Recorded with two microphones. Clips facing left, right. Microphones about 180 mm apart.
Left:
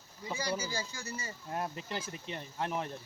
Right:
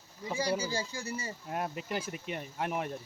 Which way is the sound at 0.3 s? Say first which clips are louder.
Right 4 dB; 30° right (ahead or behind).